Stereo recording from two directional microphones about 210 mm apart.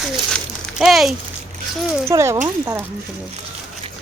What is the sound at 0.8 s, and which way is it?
Speech, centre (ahead or behind).